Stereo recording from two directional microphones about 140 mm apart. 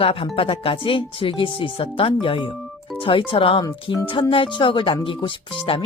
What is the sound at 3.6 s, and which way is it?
Speech, 25° left (ahead or behind).